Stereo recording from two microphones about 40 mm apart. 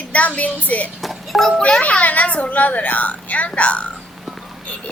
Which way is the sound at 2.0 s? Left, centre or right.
Left.